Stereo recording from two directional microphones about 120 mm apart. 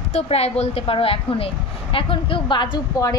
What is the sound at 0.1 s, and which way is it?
A woman's voice, 60° left (ahead or behind).